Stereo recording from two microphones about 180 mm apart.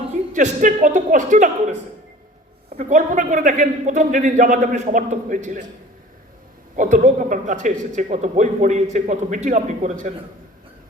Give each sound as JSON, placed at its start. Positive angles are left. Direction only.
{"t": 0.1, "sound": "a man's voice", "side_deg": -40}
{"t": 2.7, "sound": "a man's voice", "side_deg": -45}
{"t": 6.7, "sound": "a man's voice", "side_deg": -45}